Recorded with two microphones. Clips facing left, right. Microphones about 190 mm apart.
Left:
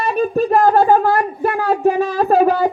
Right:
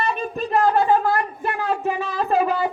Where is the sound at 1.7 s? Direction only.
40° left (ahead or behind).